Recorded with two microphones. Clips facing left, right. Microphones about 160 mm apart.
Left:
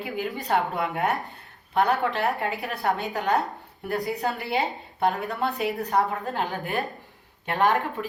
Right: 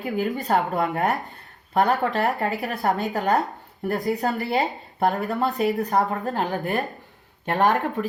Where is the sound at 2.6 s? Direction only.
40° right (ahead or behind).